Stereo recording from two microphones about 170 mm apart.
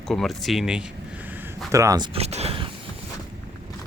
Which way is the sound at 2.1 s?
40° right (ahead or behind).